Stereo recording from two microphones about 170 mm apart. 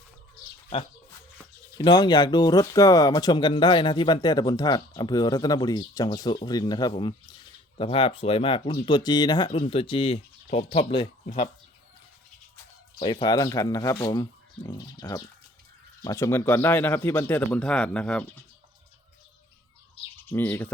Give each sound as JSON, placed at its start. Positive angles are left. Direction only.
{"t": 1.8, "sound": "speech", "side_deg": 25}
{"t": 13.0, "sound": "speech", "side_deg": 30}
{"t": 20.2, "sound": "speech", "side_deg": 10}